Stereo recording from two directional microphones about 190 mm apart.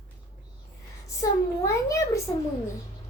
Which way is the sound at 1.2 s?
15° left (ahead or behind).